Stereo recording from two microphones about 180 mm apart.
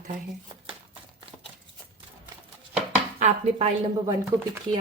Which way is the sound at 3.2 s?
40° right (ahead or behind).